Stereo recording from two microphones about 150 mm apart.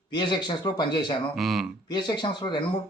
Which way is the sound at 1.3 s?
Centre (ahead or behind).